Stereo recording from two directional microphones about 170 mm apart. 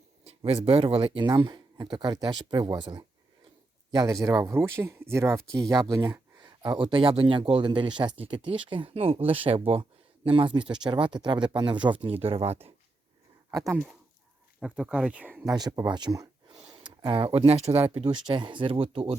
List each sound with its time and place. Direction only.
0.3 s speech: 35° right (ahead or behind)
13.5 s speech: 20° right (ahead or behind)
14.6 s speech: 5° right (ahead or behind)
15.4 s speech: 25° right (ahead or behind)